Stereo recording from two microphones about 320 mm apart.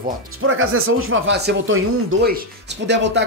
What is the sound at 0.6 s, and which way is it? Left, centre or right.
Speech, right.